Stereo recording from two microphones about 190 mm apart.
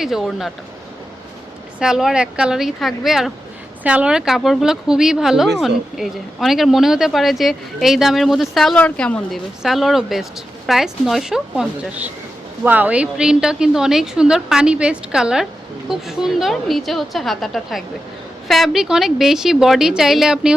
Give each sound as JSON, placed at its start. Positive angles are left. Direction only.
{"t": 0.0, "sound": "speech", "side_deg": 0}
{"t": 1.8, "sound": "speech", "side_deg": 0}